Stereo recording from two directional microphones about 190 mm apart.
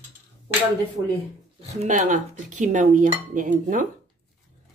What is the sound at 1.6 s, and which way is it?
Speech, 40° right (ahead or behind).